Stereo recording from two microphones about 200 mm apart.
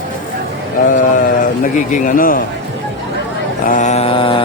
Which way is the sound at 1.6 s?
40° left (ahead or behind).